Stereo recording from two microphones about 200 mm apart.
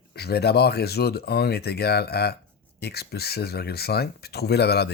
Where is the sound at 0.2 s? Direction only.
55° left (ahead or behind).